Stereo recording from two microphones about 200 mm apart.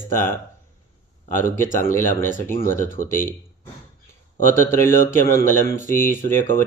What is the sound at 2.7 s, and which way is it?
Speech, 45° left (ahead or behind).